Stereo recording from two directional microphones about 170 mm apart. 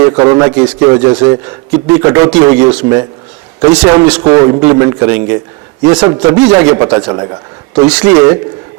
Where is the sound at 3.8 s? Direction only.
20° right (ahead or behind).